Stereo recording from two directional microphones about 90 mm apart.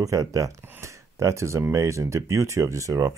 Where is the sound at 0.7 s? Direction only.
30° right (ahead or behind).